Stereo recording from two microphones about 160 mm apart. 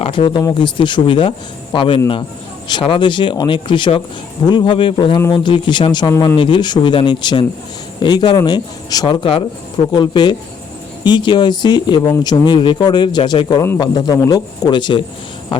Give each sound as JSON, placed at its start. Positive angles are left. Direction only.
{"t": 0.0, "sound": "speech", "side_deg": 35}